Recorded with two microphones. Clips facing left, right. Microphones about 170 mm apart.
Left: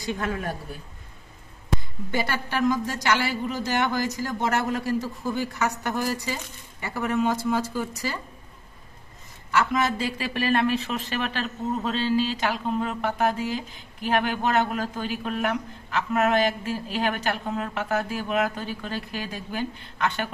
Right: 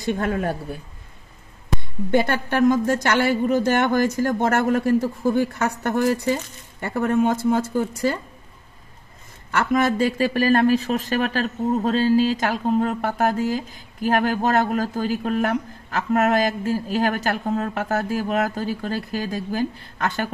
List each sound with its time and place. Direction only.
0.2 s speech: 30° right (ahead or behind)
2.0 s a woman's voice: 55° right (ahead or behind)
9.6 s speech: 50° right (ahead or behind)